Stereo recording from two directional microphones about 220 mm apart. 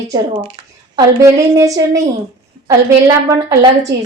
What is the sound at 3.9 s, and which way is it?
Speech, 15° right (ahead or behind).